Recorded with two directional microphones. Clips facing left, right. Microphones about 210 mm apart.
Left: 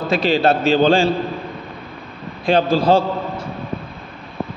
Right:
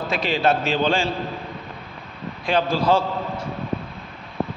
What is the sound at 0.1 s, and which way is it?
A man's voice, 35° left (ahead or behind).